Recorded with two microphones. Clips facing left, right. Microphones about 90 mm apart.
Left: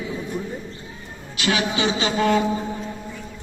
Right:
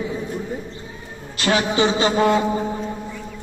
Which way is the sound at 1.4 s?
35° right (ahead or behind).